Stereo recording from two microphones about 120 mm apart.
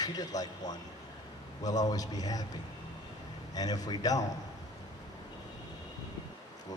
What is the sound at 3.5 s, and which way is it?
Speech, 30° left (ahead or behind).